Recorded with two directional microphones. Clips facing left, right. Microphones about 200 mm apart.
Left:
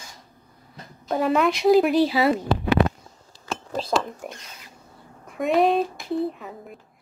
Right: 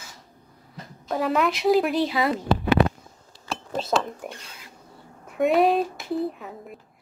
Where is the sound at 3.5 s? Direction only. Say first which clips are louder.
Even; centre (ahead or behind).